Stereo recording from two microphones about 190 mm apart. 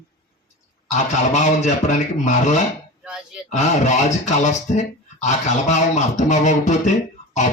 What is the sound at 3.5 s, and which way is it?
Speech, 40° left (ahead or behind).